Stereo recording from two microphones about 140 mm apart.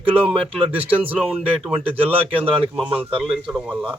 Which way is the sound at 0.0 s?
40° right (ahead or behind).